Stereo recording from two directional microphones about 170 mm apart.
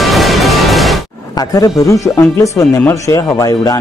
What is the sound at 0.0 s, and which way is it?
Music, centre (ahead or behind).